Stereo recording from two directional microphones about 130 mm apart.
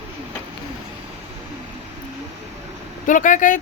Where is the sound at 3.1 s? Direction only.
80° left.